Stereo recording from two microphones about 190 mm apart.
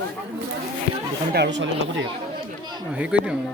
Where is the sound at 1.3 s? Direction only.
65° right (ahead or behind).